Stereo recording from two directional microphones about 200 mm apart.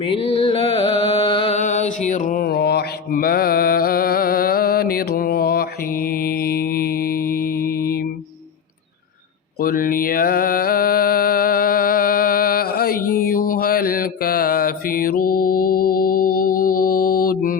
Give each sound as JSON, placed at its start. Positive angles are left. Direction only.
{"t": 0.0, "sound": "music", "side_deg": 30}
{"t": 9.6, "sound": "music", "side_deg": 45}